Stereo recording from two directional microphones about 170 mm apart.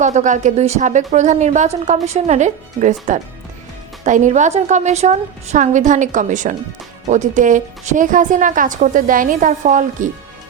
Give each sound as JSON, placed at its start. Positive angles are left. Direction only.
{"t": 0.0, "sound": "a woman's voice", "side_deg": -45}